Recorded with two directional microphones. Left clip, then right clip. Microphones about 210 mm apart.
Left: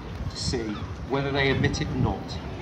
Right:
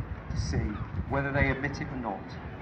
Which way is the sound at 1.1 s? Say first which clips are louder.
Left 4 dB; 5° left (ahead or behind).